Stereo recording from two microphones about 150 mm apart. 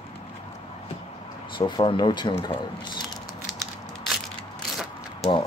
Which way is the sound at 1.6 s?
30° left (ahead or behind).